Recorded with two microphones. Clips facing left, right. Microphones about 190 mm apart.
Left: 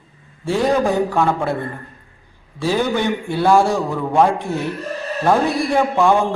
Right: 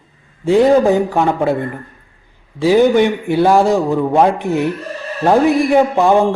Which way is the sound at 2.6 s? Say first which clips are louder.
Right 8 dB; 15° right (ahead or behind).